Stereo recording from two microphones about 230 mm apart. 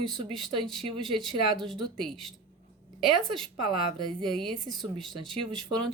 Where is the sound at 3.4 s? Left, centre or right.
Right.